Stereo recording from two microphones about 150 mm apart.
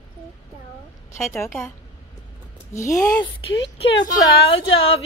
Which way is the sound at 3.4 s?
40° left (ahead or behind).